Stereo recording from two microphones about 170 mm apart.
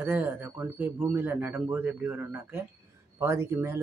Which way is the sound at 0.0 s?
10° right (ahead or behind).